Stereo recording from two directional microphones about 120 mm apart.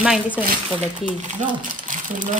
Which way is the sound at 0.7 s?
85° right.